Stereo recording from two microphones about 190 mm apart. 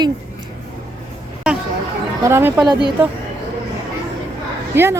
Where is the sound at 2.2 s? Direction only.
15° right (ahead or behind).